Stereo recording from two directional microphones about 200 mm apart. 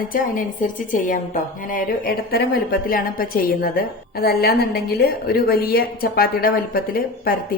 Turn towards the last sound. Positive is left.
turn(degrees=45)  # may be behind; listen again after turning